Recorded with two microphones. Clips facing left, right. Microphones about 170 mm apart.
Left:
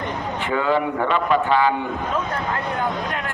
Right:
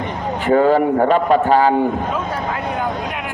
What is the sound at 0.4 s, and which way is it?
A man's voice, 40° right (ahead or behind).